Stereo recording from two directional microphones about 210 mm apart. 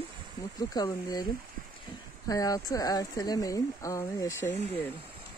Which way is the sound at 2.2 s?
15° left (ahead or behind).